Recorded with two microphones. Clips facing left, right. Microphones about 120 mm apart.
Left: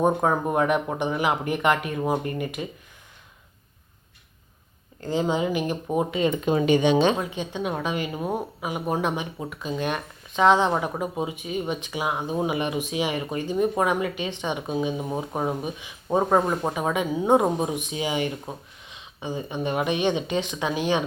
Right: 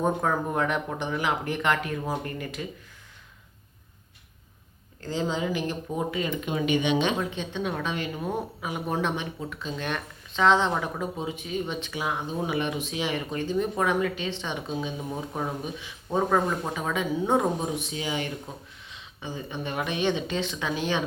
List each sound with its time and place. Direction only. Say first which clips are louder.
0.0 s speech: left 4 dB; 20° left (ahead or behind)
4.9 s speech: left 4 dB; 15° left (ahead or behind)
6.4 s speech: left 6 dB; 35° left (ahead or behind)
7.2 s speech: left 1 dB; 10° left (ahead or behind)
15.1 s speech: left 4 dB; 25° left (ahead or behind)